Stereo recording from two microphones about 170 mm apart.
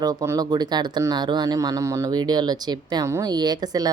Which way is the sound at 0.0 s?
20° right (ahead or behind).